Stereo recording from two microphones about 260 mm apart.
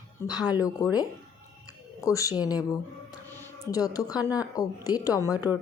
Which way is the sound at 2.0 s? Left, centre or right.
Centre.